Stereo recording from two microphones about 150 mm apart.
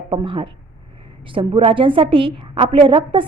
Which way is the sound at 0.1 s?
35° right (ahead or behind).